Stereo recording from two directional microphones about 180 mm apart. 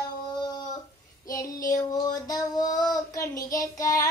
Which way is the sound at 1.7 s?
20° left (ahead or behind).